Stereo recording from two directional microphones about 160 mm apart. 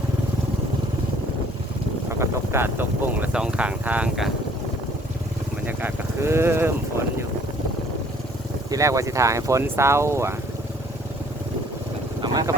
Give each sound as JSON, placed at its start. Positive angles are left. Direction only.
{"t": 2.0, "sound": "speech", "side_deg": -15}
{"t": 5.6, "sound": "speech", "side_deg": -15}
{"t": 8.7, "sound": "speech", "side_deg": -20}
{"t": 12.2, "sound": "speech", "side_deg": -25}